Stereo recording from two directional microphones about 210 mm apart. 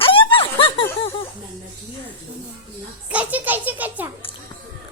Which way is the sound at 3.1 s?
5° right (ahead or behind).